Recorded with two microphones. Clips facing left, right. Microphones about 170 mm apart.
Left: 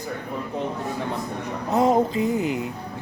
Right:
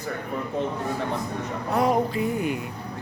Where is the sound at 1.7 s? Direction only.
25° left (ahead or behind).